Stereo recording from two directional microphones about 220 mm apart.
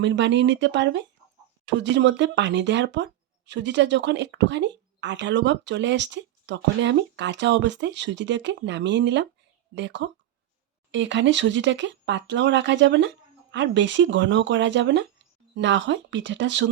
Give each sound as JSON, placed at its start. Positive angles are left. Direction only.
{"t": 0.0, "sound": "speech", "side_deg": -55}